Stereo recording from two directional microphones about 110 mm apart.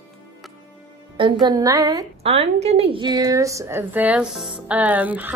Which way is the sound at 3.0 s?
35° right (ahead or behind).